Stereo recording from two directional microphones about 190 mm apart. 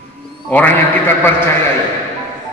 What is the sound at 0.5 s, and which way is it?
Speech, 10° left (ahead or behind).